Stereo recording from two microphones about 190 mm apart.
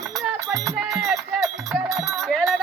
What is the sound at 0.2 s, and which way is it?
Music, centre (ahead or behind).